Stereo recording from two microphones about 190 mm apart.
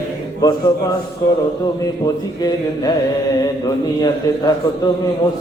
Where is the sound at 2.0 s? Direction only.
20° left (ahead or behind).